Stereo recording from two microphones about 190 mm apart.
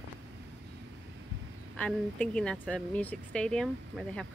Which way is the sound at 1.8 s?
5° left (ahead or behind).